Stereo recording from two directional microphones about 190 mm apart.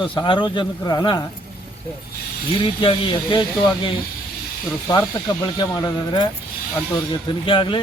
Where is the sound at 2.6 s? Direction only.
25° left (ahead or behind).